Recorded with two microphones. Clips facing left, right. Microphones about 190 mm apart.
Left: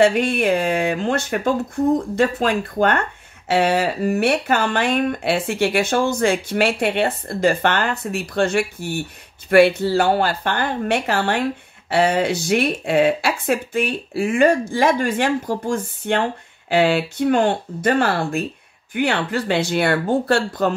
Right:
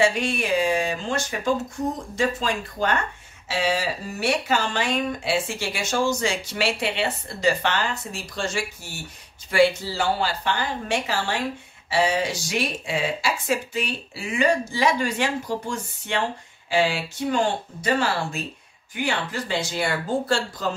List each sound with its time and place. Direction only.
0.0 s speech: 55° left (ahead or behind)